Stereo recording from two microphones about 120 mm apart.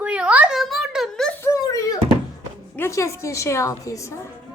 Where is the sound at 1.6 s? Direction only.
30° left (ahead or behind).